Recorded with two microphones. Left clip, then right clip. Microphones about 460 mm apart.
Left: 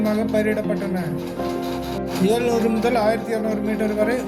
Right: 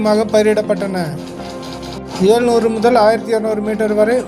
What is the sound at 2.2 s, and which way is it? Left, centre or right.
Speech, left.